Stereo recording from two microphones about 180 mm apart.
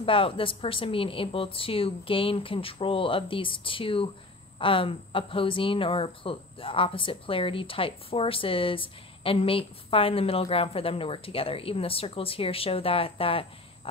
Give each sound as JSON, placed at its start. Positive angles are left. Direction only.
{"t": 0.0, "sound": "a woman's voice", "side_deg": 30}